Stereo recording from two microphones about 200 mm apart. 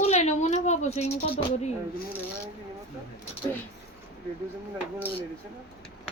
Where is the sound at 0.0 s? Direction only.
35° left (ahead or behind).